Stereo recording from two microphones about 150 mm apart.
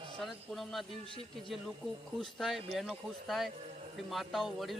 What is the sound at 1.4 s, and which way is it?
Speech, centre (ahead or behind).